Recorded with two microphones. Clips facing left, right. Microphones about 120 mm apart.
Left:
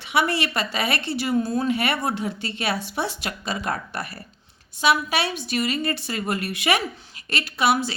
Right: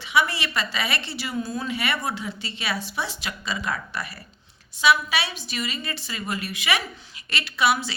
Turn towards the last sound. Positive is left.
turn(degrees=45)  # may be behind; listen again after turning